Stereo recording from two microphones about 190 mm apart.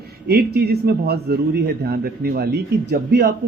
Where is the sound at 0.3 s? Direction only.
55° right (ahead or behind).